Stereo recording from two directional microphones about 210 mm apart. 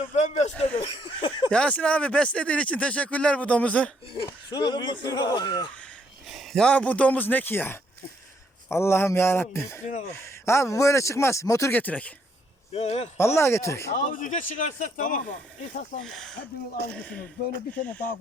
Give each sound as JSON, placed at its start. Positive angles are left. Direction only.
{"t": 0.0, "sound": "a sound", "side_deg": 30}
{"t": 1.0, "sound": "speech", "side_deg": 25}
{"t": 1.5, "sound": "speech", "side_deg": 5}
{"t": 4.1, "sound": "speech", "side_deg": 25}
{"t": 5.8, "sound": "a man's voice", "side_deg": 0}
{"t": 12.7, "sound": "a man's voice", "side_deg": 30}
{"t": 13.1, "sound": "a man's voice", "side_deg": 10}
{"t": 13.9, "sound": "a man's voice", "side_deg": 40}
{"t": 16.0, "sound": "speech", "side_deg": 0}
{"t": 16.8, "sound": "speech", "side_deg": -50}